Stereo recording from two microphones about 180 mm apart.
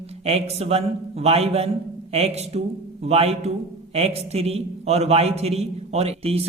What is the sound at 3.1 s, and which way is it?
A man's voice, 35° right (ahead or behind).